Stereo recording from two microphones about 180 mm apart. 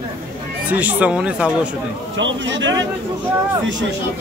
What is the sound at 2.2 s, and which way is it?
Speech, 90° right.